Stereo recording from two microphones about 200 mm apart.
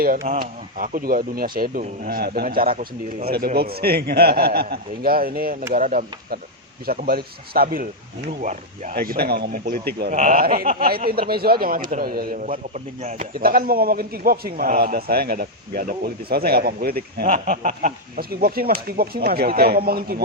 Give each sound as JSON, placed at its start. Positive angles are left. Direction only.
{"t": 0.3, "sound": "speech", "side_deg": -45}